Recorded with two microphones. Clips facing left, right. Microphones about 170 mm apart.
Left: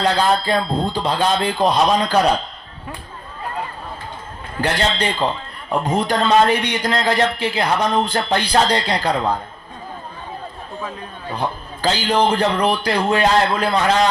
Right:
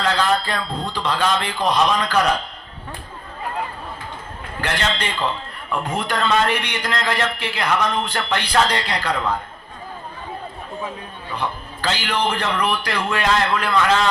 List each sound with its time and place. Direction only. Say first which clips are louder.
0.0 s a man's voice: left 3 dB; 35° left (ahead or behind)
4.6 s a man's voice: left 4 dB; 35° left (ahead or behind)
11.3 s a man's voice: left 2 dB; 35° left (ahead or behind)